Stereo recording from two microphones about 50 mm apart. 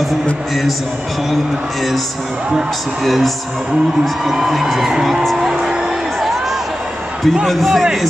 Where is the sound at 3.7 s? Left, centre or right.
Centre.